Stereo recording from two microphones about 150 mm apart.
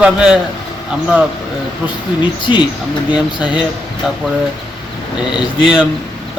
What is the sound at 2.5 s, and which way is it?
Speech, 30° left (ahead or behind).